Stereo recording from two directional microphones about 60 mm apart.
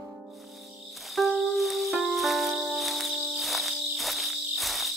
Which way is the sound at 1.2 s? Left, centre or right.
Centre.